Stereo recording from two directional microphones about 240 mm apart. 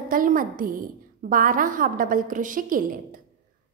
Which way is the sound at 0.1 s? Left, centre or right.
Right.